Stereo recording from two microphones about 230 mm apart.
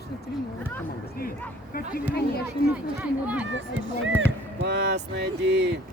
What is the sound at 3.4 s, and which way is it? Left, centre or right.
Speech, right.